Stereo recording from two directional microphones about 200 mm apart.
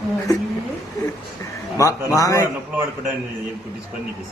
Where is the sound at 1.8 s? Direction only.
15° left (ahead or behind).